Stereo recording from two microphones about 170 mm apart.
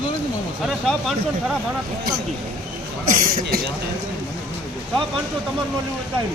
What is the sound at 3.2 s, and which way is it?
Speech, 60° right (ahead or behind).